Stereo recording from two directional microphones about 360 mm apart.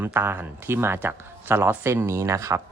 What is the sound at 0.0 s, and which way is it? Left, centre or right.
Speech, centre.